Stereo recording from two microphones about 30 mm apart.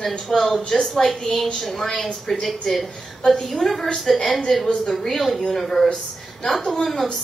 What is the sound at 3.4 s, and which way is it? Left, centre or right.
A woman's voice, centre.